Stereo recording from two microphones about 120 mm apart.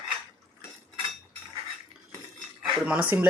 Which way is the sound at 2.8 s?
15° right (ahead or behind).